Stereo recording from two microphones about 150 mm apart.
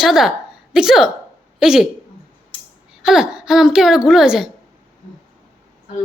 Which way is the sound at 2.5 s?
35° left (ahead or behind).